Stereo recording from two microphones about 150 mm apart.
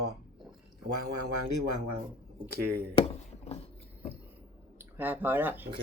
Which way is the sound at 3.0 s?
45° left (ahead or behind).